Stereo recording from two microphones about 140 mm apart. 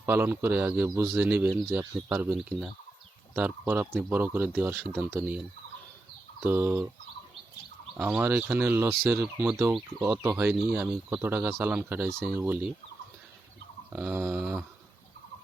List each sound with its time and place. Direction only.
0.0 s speech: 15° right (ahead or behind)
6.4 s speech: 15° right (ahead or behind)
8.1 s speech: 10° right (ahead or behind)
13.9 s speech: 15° right (ahead or behind)